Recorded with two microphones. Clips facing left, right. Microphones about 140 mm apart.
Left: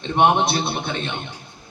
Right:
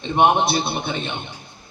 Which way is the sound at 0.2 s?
5° right (ahead or behind).